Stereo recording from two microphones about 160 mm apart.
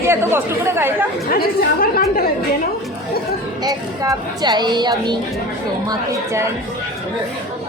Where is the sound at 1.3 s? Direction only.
70° left (ahead or behind).